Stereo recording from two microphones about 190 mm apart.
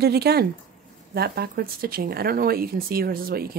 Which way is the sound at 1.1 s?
55° right (ahead or behind).